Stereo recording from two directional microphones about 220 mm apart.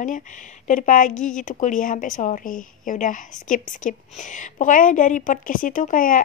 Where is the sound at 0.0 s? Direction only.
35° left (ahead or behind).